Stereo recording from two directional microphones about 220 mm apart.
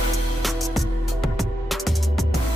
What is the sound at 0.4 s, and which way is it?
Music, centre (ahead or behind).